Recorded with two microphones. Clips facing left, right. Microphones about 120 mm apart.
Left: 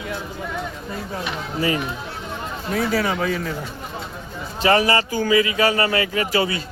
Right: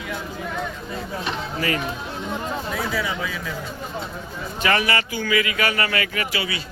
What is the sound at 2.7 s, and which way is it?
Speech, 60° left (ahead or behind).